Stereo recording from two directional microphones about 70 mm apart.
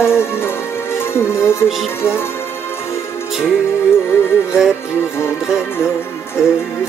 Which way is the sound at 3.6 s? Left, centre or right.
Left.